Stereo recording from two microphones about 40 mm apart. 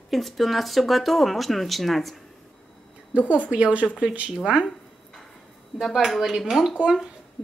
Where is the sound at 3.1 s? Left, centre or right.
Right.